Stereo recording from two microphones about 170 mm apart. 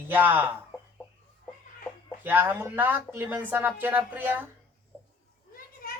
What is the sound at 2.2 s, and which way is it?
Speech, 10° right (ahead or behind).